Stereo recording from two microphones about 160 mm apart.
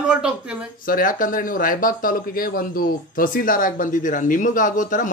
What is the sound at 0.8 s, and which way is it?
Speech, 60° left (ahead or behind).